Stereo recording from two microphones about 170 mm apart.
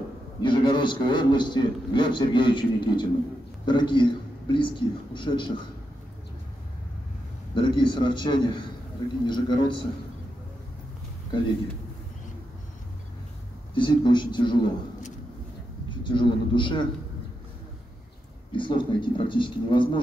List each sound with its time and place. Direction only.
0.4 s a man's voice: 30° left (ahead or behind)
7.5 s a man's voice: 30° left (ahead or behind)
13.7 s a man's voice: 25° left (ahead or behind)
16.0 s a man's voice: 30° left (ahead or behind)
18.6 s a man's voice: 30° left (ahead or behind)